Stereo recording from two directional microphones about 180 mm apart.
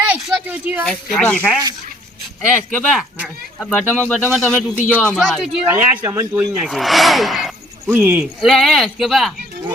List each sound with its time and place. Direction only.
0.0 s a sound: 5° right (ahead or behind)
0.9 s speech: 5° left (ahead or behind)
2.7 s speech: centre (ahead or behind)
5.6 s speech: 10° right (ahead or behind)
6.7 s speech: centre (ahead or behind)
7.9 s speech: 10° right (ahead or behind)
8.4 s speech: centre (ahead or behind)